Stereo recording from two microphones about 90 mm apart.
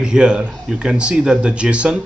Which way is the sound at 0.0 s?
10° right (ahead or behind).